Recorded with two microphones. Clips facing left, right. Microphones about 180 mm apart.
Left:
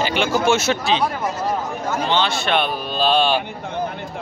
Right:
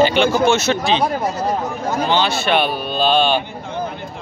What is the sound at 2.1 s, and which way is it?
Speech, 5° right (ahead or behind).